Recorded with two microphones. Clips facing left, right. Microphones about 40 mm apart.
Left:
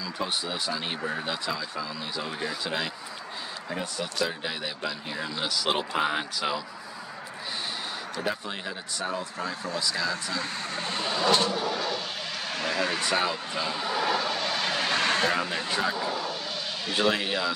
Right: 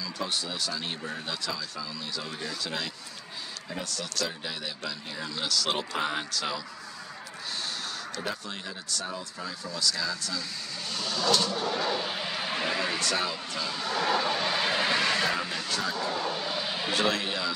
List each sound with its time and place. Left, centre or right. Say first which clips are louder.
0.0 s speech: left 2 dB; centre
8.2 s speech: left 5 dB; centre
10.3 s speech: left 5 dB; left
11.5 s vehicle: even; centre
13.0 s speech: left 3 dB; left
13.9 s vehicle: right 1 dB; centre
14.7 s vehicle: right 1 dB; right
15.0 s vehicle: left 1 dB; left
15.5 s speech: left 3 dB; left
16.1 s vehicle: right 1 dB; centre
17.1 s speech: left 3 dB; centre